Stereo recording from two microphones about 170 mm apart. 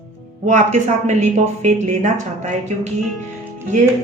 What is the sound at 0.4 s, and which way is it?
A woman's voice, 45° right (ahead or behind).